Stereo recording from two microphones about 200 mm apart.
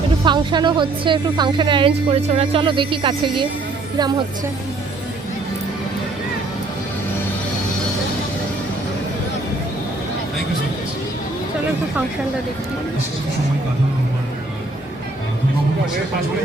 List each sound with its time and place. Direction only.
0.3 s a woman's voice: 25° right (ahead or behind)